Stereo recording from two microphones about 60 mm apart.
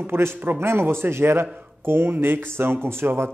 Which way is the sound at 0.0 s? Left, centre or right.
Right.